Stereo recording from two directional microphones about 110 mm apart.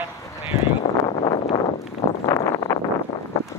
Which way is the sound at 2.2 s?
35° left (ahead or behind).